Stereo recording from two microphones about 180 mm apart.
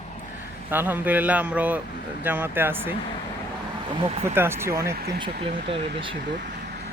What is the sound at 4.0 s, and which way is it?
Speech, 35° right (ahead or behind).